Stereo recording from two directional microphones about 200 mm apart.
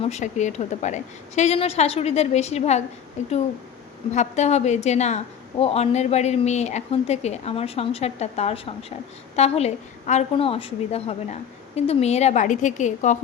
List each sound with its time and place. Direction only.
0.0 s a woman's voice: 35° left (ahead or behind)